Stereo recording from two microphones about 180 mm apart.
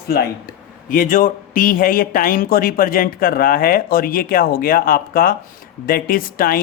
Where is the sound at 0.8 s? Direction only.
50° left (ahead or behind).